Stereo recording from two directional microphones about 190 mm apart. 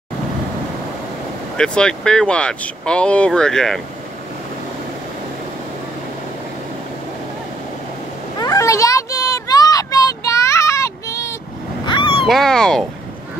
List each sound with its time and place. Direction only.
1.6 s speech: 5° left (ahead or behind)
8.4 s a sound: 15° left (ahead or behind)
12.3 s speech: 5° left (ahead or behind)